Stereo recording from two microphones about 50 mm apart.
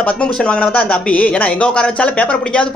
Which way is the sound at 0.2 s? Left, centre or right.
Centre.